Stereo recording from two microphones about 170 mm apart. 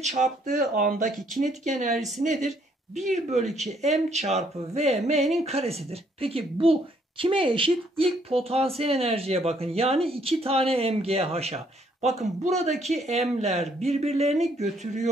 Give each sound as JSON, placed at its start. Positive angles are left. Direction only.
{"t": 0.5, "sound": "speech", "side_deg": -55}